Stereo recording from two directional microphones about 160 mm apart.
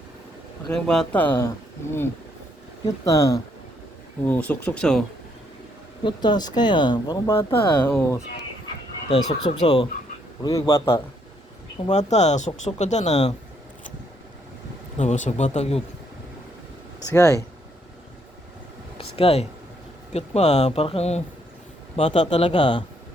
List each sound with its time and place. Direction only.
0.7 s speech: 5° left (ahead or behind); by 3.4 s 20° left (ahead or behind)
4.2 s speech: 10° left (ahead or behind)
6.0 s speech: 30° left (ahead or behind)
7.9 s speech: 15° left (ahead or behind)
9.0 s speech: 40° left (ahead or behind)
10.4 s speech: 20° left (ahead or behind)
11.9 s speech: 45° left (ahead or behind)
14.9 s speech: 50° left (ahead or behind)
17.1 s speech: 20° left (ahead or behind)
18.9 s a sound: 35° left (ahead or behind)
20.1 s speech: 40° left (ahead or behind)